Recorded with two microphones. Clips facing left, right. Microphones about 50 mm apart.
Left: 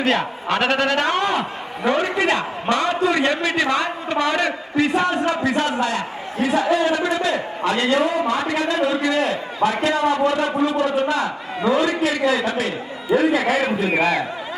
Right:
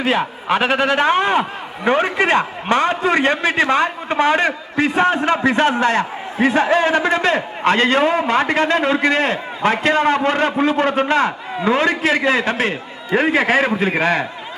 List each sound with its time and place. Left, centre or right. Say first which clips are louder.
0.0 s a man's voice: right 1 dB; centre; by 14.3 s right